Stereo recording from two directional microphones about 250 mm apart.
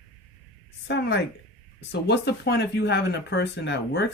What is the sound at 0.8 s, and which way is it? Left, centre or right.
Speech, left.